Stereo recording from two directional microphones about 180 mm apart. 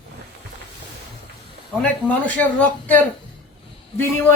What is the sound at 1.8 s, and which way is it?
A man's voice, 10° left (ahead or behind).